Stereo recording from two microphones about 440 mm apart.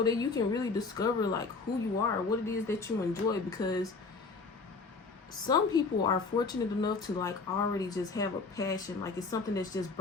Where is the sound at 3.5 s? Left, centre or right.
Centre.